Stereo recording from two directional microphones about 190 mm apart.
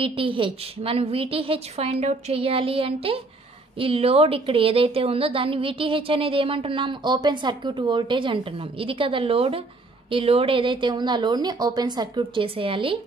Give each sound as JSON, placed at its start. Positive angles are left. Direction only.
{"t": 0.0, "sound": "a woman's voice", "side_deg": -25}